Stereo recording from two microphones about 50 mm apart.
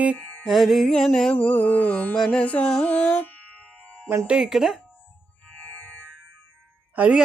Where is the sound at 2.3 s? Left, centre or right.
Left.